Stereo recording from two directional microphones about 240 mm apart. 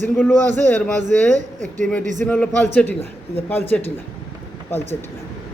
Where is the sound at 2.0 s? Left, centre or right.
Right.